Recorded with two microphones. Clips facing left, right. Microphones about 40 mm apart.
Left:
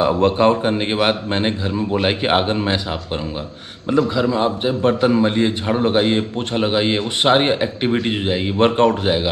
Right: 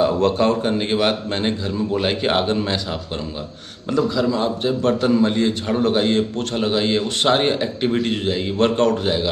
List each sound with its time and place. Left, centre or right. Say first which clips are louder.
0.0 s a man's voice: left 2 dB; left
4.1 s a man's voice: left 2 dB; left